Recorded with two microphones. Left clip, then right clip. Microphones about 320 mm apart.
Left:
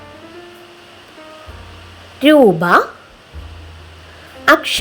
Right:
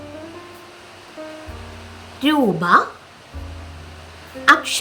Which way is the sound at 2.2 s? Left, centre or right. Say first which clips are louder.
Left 9 dB; centre.